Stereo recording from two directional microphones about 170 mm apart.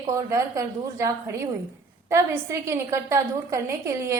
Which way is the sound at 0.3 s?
20° right (ahead or behind).